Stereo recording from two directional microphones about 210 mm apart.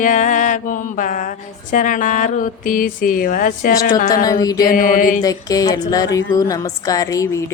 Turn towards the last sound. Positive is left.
turn(degrees=15)  # may be behind; listen again after turning